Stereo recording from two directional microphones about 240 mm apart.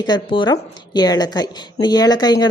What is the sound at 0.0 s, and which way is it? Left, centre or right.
A woman's voice, centre.